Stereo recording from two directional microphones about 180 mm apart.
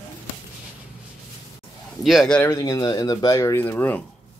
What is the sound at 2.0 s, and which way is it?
Speech, centre (ahead or behind).